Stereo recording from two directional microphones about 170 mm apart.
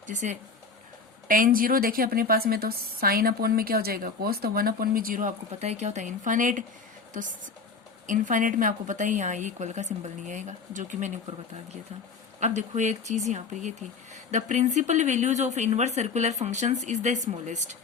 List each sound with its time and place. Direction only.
0.1 s a woman's voice: 45° right (ahead or behind)
12.4 s speech: 45° right (ahead or behind)